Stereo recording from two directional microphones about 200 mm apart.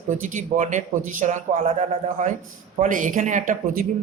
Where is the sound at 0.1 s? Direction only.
40° right (ahead or behind).